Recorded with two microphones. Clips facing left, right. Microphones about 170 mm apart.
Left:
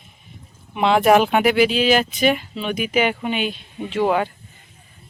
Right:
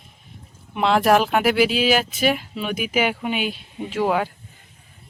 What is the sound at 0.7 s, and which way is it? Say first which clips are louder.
Speech: left 2 dB; centre (ahead or behind).